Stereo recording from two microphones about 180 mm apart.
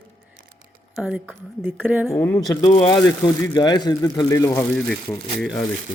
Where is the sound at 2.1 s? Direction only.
15° left (ahead or behind).